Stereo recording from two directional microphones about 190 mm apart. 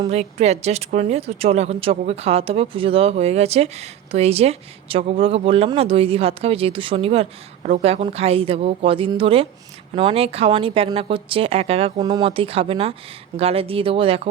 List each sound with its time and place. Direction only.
0.1 s speech: 35° right (ahead or behind)